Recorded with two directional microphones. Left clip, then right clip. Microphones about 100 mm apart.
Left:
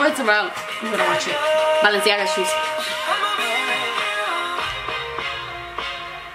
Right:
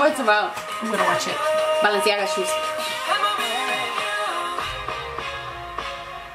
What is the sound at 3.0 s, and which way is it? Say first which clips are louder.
Music: even; 20° left (ahead or behind).